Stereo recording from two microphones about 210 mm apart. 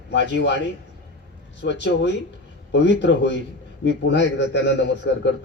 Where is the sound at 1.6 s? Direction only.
55° left (ahead or behind).